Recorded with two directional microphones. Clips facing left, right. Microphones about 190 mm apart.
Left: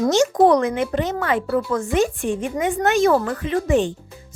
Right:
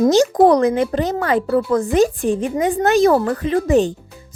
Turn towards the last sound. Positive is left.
turn(degrees=-40)  # may be behind; listen again after turning